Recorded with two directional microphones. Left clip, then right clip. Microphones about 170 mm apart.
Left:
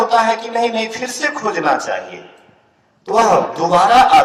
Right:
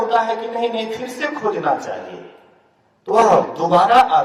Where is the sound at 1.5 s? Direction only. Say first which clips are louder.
Left 4 dB; 30° left (ahead or behind).